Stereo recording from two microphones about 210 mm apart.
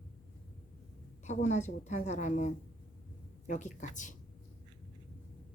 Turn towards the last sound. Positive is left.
turn(degrees=35)  # may be behind; listen again after turning